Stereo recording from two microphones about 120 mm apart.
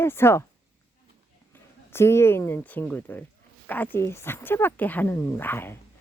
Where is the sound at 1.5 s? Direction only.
20° left (ahead or behind).